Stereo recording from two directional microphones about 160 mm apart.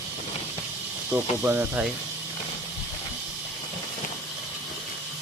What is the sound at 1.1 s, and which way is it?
Speech, 10° right (ahead or behind).